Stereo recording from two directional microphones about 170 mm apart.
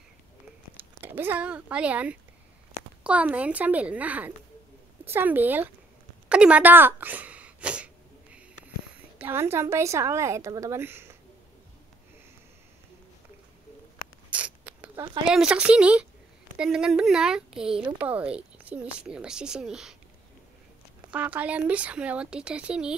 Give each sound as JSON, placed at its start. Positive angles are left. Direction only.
{"t": 1.0, "sound": "a woman's voice", "side_deg": -10}
{"t": 6.2, "sound": "a sound", "side_deg": -5}
{"t": 9.2, "sound": "a woman's voice", "side_deg": -15}
{"t": 14.3, "sound": "a sound", "side_deg": -10}
{"t": 15.2, "sound": "speech", "side_deg": -5}
{"t": 21.1, "sound": "a woman's voice", "side_deg": -10}